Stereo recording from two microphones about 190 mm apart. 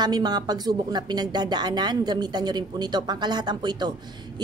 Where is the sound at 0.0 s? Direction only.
20° right (ahead or behind).